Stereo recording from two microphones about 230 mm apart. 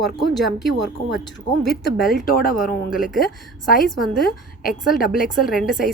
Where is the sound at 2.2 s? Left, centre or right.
Left.